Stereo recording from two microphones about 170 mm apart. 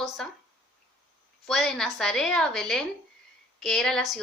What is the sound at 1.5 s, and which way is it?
A woman's voice, centre (ahead or behind).